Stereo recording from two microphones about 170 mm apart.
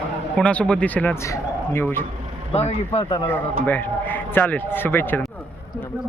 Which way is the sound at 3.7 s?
10° left (ahead or behind).